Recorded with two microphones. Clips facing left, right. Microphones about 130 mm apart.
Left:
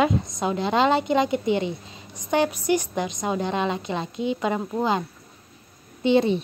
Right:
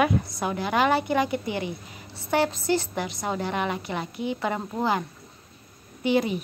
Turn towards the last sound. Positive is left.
turn(degrees=25)  # may be behind; listen again after turning